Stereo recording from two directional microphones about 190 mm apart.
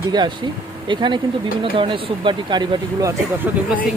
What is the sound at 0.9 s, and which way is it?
Speech, 25° right (ahead or behind).